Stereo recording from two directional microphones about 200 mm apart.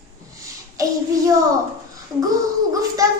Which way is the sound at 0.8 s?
15° right (ahead or behind).